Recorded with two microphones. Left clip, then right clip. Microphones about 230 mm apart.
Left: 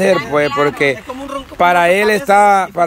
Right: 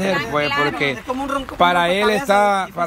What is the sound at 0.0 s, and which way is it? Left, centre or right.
Speech, left.